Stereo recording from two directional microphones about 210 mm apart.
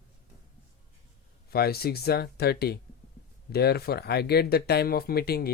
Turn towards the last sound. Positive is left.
turn(degrees=50)  # may be behind; listen again after turning